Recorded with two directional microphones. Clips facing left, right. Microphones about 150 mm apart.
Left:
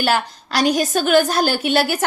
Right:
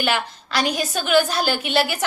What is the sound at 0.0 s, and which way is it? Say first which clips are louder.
A woman's voice: left 4 dB; 40° left (ahead or behind).